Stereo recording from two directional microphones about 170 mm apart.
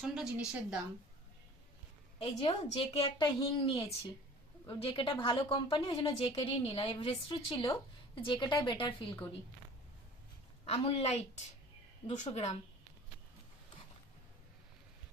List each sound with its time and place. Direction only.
0.0 s a woman's voice: 5° right (ahead or behind)
2.1 s a woman's voice: 30° left (ahead or behind)
10.7 s a woman's voice: 35° left (ahead or behind)